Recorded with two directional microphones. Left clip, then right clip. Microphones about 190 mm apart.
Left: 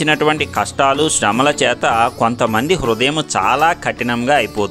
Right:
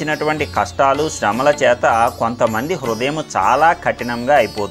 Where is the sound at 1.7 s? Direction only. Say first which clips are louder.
Right 1 dB; 45° left (ahead or behind).